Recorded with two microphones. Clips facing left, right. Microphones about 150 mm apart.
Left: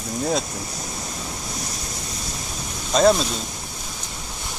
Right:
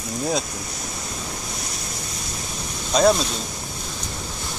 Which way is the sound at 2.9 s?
Centre (ahead or behind).